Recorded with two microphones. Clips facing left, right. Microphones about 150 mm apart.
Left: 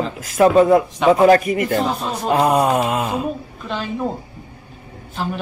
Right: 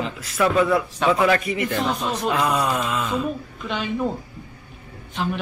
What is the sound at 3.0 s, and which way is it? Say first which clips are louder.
Speech: left 2 dB; 35° left (ahead or behind).